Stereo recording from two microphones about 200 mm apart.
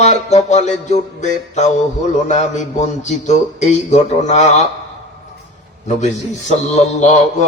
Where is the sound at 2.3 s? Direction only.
35° left (ahead or behind).